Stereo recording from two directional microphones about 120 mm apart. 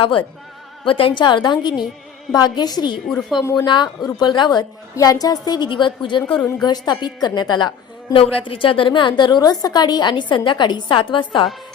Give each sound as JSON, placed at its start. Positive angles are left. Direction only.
{"t": 0.0, "sound": "a woman's voice", "side_deg": 45}
{"t": 3.1, "sound": "speech", "side_deg": 5}
{"t": 3.6, "sound": "a woman's voice", "side_deg": 40}
{"t": 8.1, "sound": "a woman's voice", "side_deg": 45}